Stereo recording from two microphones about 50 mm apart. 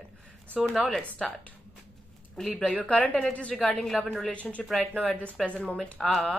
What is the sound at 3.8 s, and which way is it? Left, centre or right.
Speech, centre.